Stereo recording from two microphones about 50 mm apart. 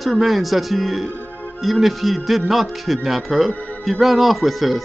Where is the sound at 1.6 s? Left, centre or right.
Centre.